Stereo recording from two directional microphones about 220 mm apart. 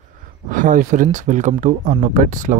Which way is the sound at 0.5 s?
35° right (ahead or behind).